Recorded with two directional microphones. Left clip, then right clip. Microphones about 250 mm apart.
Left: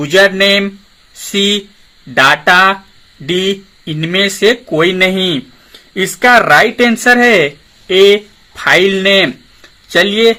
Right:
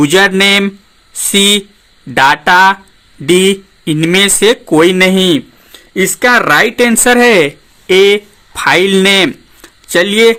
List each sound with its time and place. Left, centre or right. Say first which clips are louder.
0.0 s speech: right 1 dB; right